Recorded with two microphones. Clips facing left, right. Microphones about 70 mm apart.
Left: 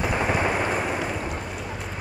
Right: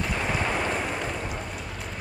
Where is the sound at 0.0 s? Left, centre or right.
Centre.